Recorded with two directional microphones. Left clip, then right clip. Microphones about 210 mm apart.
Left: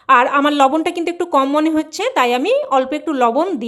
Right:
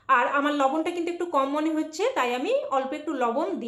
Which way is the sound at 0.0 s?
50° left (ahead or behind).